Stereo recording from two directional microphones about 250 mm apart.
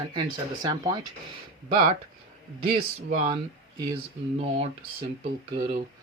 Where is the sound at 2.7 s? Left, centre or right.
Right.